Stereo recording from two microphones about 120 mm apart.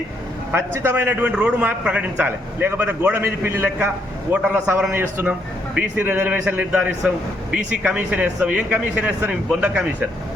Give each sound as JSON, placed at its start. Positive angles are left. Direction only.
{"t": 0.5, "sound": "a man's voice", "side_deg": -15}